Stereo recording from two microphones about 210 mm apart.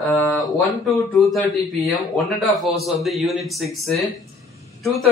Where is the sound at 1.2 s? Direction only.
Centre (ahead or behind).